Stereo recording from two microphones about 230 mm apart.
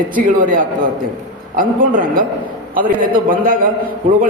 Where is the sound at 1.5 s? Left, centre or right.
Right.